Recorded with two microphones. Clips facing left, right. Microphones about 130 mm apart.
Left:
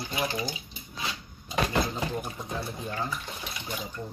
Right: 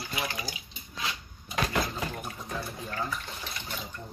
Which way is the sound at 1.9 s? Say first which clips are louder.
Left 3 dB; 20° left (ahead or behind).